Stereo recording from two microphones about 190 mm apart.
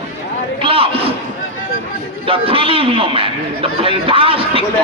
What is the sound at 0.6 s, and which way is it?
Speech, 30° right (ahead or behind).